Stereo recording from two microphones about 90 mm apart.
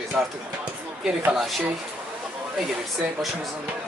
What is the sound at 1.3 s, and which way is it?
Speech, centre (ahead or behind).